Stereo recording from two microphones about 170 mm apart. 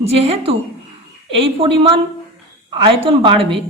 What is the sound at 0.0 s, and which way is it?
A woman's voice, 35° right (ahead or behind).